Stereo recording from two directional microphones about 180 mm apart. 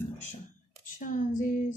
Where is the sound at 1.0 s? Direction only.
45° left (ahead or behind).